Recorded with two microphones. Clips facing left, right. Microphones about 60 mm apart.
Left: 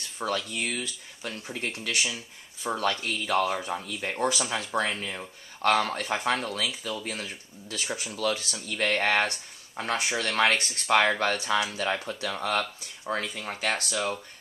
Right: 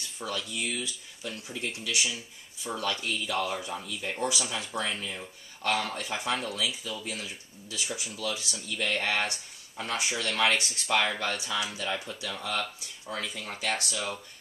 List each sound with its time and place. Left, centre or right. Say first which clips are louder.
0.2 s speech: left 4 dB; left
13.6 s speech: left 3 dB; left